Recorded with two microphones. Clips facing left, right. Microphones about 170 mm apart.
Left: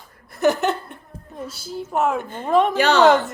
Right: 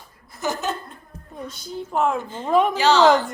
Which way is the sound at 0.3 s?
65° left (ahead or behind).